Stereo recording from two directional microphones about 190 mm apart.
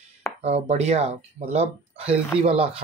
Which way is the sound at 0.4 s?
35° right (ahead or behind).